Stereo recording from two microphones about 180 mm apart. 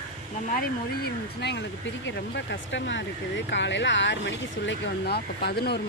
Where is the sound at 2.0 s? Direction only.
85° left; by 5.8 s 65° left (ahead or behind).